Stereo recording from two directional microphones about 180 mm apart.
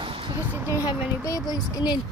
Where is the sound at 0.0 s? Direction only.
30° right (ahead or behind).